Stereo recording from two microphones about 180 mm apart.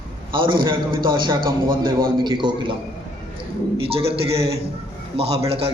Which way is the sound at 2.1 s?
25° right (ahead or behind).